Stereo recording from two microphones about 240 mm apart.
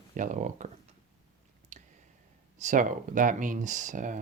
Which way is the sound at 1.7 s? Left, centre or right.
Right.